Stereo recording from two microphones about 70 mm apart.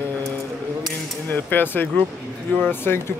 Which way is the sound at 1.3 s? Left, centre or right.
Left.